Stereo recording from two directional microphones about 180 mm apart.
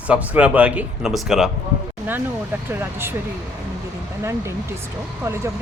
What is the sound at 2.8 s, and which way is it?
Speech, 15° right (ahead or behind).